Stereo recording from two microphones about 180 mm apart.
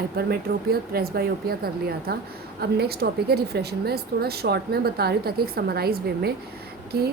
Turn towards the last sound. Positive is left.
turn(degrees=-60)  # may be behind; listen again after turning